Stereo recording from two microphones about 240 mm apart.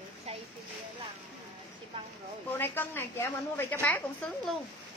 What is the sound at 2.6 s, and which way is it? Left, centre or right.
A woman's voice, centre.